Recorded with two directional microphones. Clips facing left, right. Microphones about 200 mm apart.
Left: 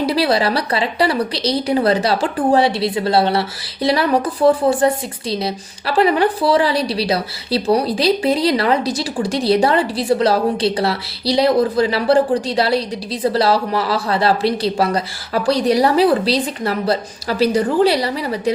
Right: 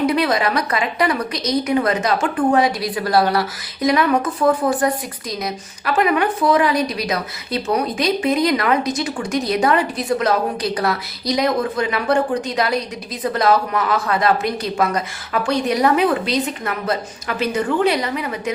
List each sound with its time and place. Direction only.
0.0 s a woman's voice: 30° left (ahead or behind)